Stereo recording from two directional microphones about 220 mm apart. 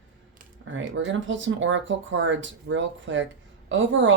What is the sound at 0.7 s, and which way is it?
Speech, 60° right (ahead or behind).